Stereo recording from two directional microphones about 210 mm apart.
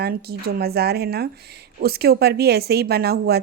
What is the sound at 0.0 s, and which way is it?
Speech, 50° right (ahead or behind).